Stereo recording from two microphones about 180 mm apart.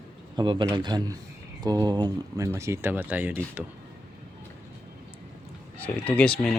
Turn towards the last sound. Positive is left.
turn(degrees=5)  # may be behind; listen again after turning